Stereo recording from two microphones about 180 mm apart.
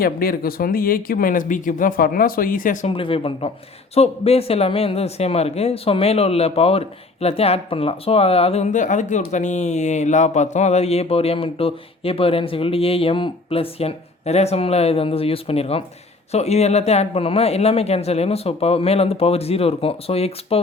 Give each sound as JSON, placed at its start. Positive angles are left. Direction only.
{"t": 0.0, "sound": "speech", "side_deg": 55}
{"t": 2.9, "sound": "speech", "side_deg": 30}